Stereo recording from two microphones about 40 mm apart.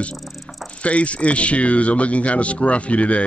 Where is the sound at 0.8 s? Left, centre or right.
Left.